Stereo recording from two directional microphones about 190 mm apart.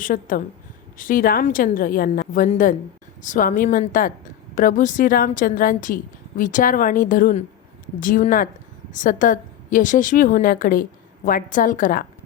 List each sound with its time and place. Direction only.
0.0 s a woman's voice: 45° left (ahead or behind)